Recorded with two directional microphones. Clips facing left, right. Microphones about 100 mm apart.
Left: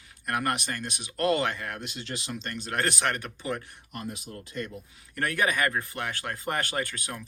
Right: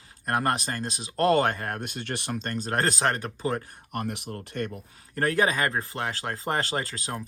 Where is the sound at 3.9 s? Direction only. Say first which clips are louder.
Right 5 dB; 65° right (ahead or behind).